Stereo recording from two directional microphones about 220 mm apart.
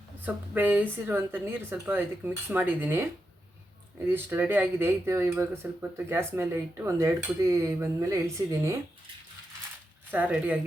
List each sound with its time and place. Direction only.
0.3 s speech: 10° right (ahead or behind)
10.1 s speech: 5° right (ahead or behind)